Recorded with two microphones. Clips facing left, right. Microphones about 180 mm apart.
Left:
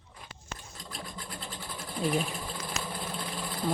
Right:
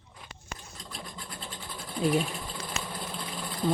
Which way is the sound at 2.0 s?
Centre (ahead or behind).